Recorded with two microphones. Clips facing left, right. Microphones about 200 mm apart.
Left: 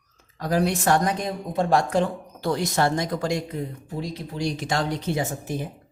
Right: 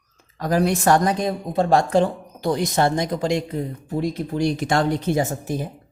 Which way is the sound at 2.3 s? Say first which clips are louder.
Right 3 dB; 15° right (ahead or behind).